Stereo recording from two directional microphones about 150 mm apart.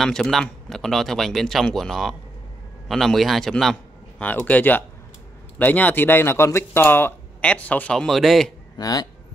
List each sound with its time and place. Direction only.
0.0 s speech: 5° left (ahead or behind)
8.7 s speech: 25° left (ahead or behind)